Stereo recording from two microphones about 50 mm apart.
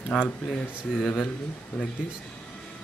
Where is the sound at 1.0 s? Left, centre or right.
Centre.